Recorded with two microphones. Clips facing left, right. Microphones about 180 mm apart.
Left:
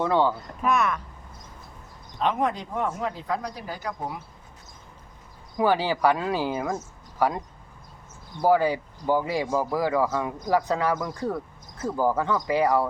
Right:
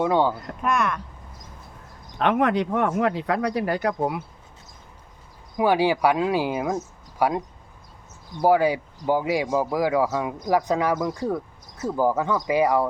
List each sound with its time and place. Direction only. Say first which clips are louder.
0.0 s speech: right 2 dB; 15° right (ahead or behind)
0.6 s speech: even; centre (ahead or behind)
2.1 s speech: right 5 dB; 70° right (ahead or behind)
5.5 s speech: right 3 dB; 15° right (ahead or behind)